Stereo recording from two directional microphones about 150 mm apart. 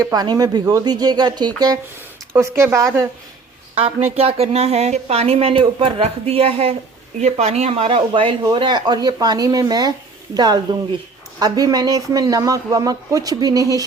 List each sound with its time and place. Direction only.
0.0 s speech: 25° right (ahead or behind)
3.8 s speech: 40° right (ahead or behind); by 13.8 s 25° right (ahead or behind)